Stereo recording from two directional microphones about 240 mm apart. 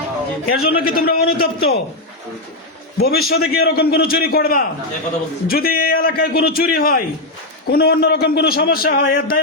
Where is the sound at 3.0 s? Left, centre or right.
Left.